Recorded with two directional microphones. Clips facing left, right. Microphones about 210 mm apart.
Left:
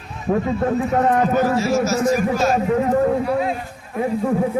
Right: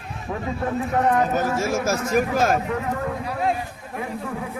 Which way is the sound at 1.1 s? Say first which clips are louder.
Left 4 dB; 45° left (ahead or behind).